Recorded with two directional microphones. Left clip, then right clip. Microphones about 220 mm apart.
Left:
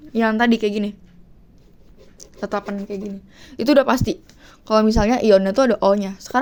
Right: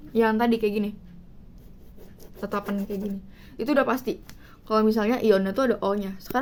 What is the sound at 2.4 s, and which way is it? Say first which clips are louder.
Speech: left 5 dB; 25° left (ahead or behind).